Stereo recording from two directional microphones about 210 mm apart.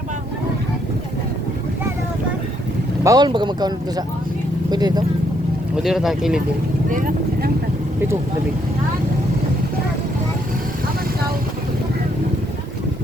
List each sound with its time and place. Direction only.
3.0 s speech: 20° right (ahead or behind)
5.7 s speech: centre (ahead or behind)
6.9 s speech: 40° right (ahead or behind)